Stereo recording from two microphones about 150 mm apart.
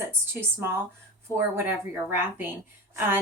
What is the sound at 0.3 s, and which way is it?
A woman's voice, 15° right (ahead or behind).